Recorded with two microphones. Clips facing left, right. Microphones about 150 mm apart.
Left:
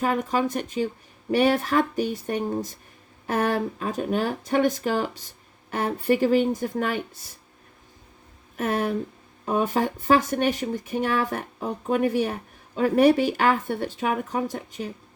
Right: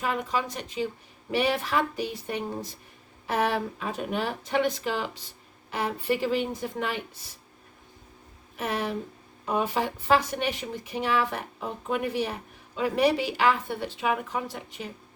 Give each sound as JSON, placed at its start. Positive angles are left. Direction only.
{"t": 0.0, "sound": "speech", "side_deg": 45}
{"t": 8.5, "sound": "speech", "side_deg": 50}